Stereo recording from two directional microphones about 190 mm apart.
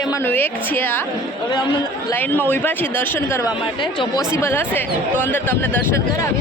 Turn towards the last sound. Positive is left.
turn(degrees=10)  # may be behind; listen again after turning